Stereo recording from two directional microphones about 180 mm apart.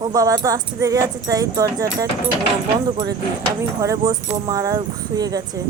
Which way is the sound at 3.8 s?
20° right (ahead or behind).